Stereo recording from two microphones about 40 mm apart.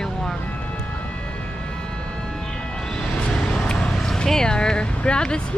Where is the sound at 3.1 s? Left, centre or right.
Left.